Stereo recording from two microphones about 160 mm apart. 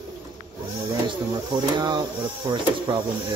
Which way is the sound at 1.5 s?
30° right (ahead or behind).